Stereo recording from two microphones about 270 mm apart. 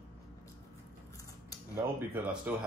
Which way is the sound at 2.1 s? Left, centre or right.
Centre.